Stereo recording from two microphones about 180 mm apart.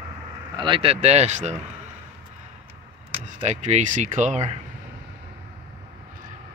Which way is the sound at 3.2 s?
40° right (ahead or behind).